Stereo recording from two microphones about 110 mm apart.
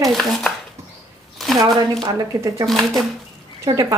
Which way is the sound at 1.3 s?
Centre (ahead or behind).